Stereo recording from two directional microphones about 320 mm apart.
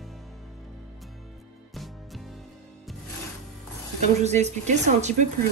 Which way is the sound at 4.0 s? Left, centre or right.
Right.